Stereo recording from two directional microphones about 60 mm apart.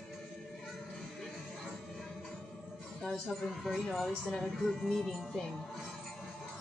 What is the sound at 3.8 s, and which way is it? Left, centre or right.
A woman's voice, centre.